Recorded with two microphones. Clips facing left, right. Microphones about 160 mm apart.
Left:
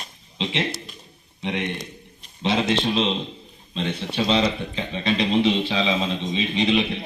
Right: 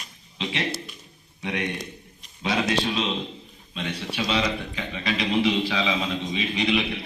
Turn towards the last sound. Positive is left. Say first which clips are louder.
# left 3 dB
turn(degrees=25)  # may be behind; listen again after turning